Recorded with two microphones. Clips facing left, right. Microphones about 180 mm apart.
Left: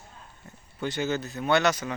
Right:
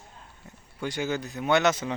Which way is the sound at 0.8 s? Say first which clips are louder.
Left 1 dB; 10° right (ahead or behind).